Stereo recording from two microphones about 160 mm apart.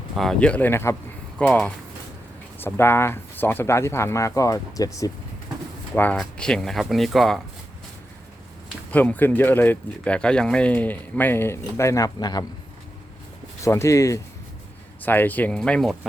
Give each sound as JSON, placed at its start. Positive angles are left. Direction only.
{"t": 0.2, "sound": "speech", "side_deg": 5}
{"t": 5.9, "sound": "speech", "side_deg": 10}
{"t": 8.9, "sound": "speech", "side_deg": 10}
{"t": 13.6, "sound": "speech", "side_deg": 20}